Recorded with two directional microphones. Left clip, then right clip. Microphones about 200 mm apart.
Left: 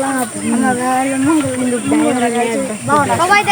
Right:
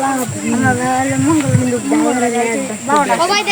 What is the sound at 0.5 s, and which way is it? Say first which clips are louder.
Speech: even; centre (ahead or behind).